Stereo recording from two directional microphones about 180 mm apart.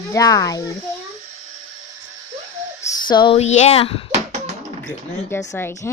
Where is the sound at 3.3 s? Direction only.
40° left (ahead or behind).